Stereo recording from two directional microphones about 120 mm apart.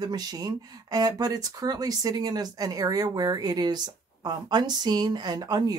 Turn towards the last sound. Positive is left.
turn(degrees=-35)  # may be behind; listen again after turning